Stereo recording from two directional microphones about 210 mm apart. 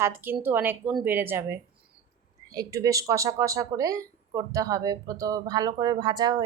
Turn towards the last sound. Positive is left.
turn(degrees=-20)  # may be behind; listen again after turning